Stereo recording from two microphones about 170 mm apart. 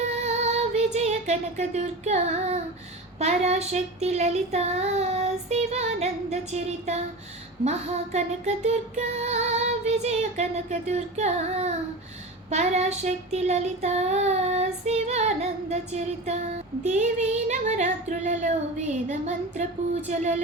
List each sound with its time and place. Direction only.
0.0 s female singing: 40° right (ahead or behind)
0.9 s child singing: 40° right (ahead or behind)
3.2 s female singing: 40° right (ahead or behind)
16.8 s speech: 45° right (ahead or behind)